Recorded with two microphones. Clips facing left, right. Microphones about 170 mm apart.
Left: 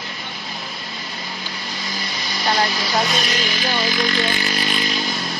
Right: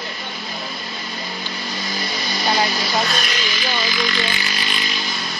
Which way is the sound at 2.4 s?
Centre (ahead or behind).